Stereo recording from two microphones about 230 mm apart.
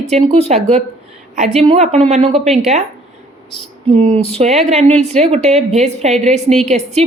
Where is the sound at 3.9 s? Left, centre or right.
Right.